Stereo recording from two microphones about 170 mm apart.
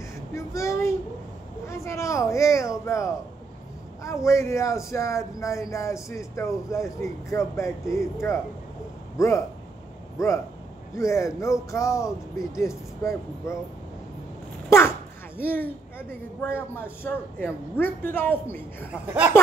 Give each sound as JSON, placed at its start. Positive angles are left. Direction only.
{"t": 0.3, "sound": "a man's voice", "side_deg": 15}
{"t": 14.7, "sound": "a sound", "side_deg": 15}
{"t": 16.3, "sound": "a man's voice", "side_deg": 15}